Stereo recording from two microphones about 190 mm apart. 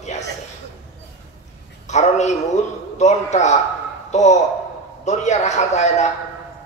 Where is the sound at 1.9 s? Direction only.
35° left (ahead or behind).